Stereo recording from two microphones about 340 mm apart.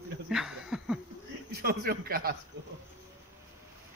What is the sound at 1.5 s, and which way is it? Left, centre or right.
Speech, right.